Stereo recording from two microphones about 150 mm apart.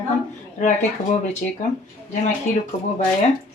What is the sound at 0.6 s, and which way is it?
Speech, 50° left (ahead or behind).